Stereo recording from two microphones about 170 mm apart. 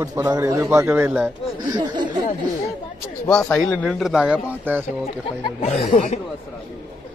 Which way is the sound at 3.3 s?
10° left (ahead or behind).